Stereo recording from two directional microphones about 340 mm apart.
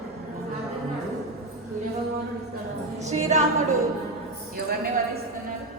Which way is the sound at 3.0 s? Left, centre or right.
Centre.